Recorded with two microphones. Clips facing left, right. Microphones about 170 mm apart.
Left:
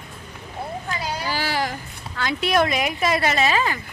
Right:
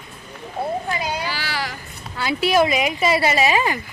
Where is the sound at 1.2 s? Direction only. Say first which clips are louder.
Left 3 dB; 45° left (ahead or behind).